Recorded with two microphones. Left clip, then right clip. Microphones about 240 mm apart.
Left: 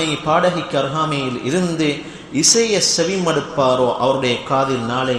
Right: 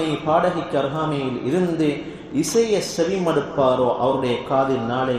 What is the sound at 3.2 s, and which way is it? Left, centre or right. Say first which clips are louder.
A man's voice: left 2 dB; left.